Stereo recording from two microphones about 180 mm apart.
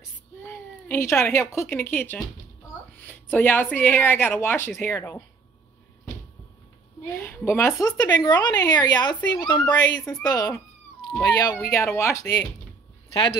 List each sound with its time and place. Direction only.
0.4 s a woman's voice: 10° left (ahead or behind)
7.1 s a woman's voice: 10° left (ahead or behind)